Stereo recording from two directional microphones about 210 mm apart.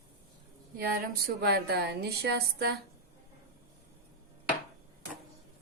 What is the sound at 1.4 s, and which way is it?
Speech, 50° right (ahead or behind).